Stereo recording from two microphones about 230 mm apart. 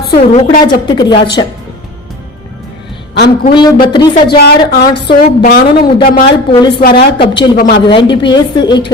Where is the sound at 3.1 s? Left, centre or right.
Left.